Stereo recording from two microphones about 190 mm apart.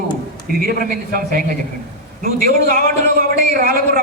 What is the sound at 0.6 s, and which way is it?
Speech, 50° right (ahead or behind).